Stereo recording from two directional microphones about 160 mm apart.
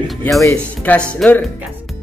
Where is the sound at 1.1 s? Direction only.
10° left (ahead or behind).